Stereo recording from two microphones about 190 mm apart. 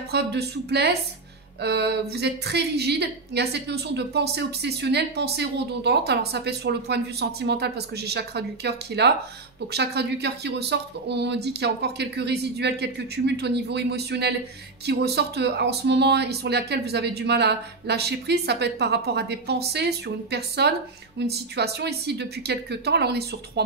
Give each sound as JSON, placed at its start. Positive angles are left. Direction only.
{"t": 0.1, "sound": "a woman's voice", "side_deg": -60}